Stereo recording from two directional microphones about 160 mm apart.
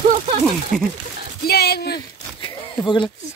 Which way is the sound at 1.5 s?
85° left.